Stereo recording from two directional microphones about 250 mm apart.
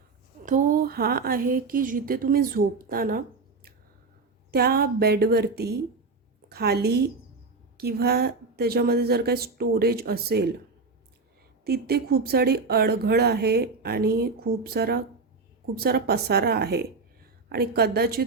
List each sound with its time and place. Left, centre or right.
0.4 s speech: right
11.6 s speech: right